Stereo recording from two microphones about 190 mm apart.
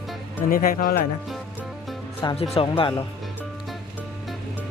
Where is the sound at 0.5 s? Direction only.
50° left (ahead or behind).